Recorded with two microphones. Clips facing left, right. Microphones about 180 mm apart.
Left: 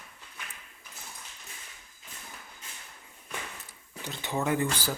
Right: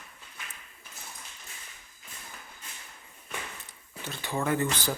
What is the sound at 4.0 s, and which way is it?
Speech, 15° left (ahead or behind).